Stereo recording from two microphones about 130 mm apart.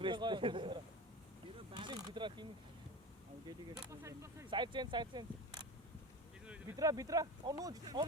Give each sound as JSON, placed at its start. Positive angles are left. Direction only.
{"t": 0.0, "sound": "a man's voice", "side_deg": -35}
{"t": 1.7, "sound": "mechanisms", "side_deg": -35}
{"t": 3.8, "sound": "speech", "side_deg": -25}
{"t": 4.4, "sound": "speech", "side_deg": -40}
{"t": 6.7, "sound": "speech", "side_deg": -25}